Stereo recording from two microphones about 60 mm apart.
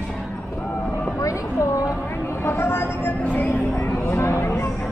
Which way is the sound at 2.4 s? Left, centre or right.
Left.